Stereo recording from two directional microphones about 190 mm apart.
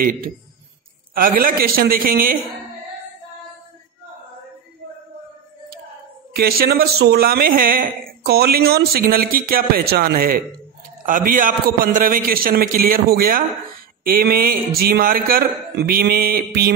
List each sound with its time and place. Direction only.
0.0 s speech: 50° right (ahead or behind)
6.3 s speech: 55° right (ahead or behind)